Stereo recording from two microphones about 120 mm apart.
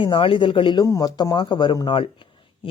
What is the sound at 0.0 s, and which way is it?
Speech, 45° left (ahead or behind).